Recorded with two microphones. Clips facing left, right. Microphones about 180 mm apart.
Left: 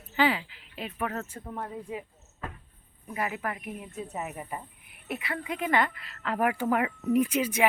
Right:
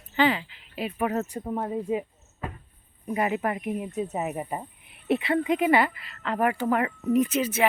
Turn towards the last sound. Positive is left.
turn(degrees=10)  # may be behind; listen again after turning